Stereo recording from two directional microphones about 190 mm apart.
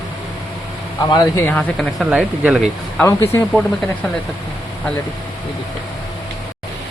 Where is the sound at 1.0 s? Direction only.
20° left (ahead or behind).